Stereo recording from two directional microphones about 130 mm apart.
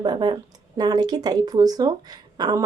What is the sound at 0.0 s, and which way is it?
A woman's voice, 35° right (ahead or behind).